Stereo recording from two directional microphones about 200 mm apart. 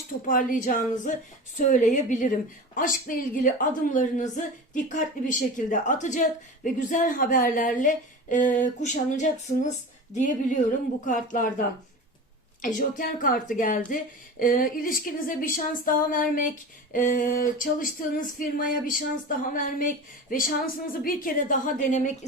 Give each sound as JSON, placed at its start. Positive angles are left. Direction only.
{"t": 0.3, "sound": "a woman's voice", "side_deg": 45}
{"t": 13.0, "sound": "a woman's voice", "side_deg": 40}